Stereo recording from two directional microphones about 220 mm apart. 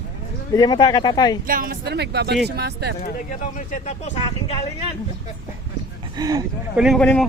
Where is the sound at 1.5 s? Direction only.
40° right (ahead or behind).